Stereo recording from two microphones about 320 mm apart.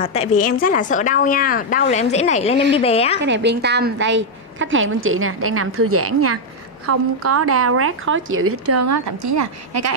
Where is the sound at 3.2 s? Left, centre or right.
Right.